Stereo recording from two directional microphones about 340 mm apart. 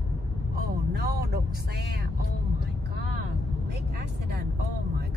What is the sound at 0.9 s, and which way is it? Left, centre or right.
Speech, right.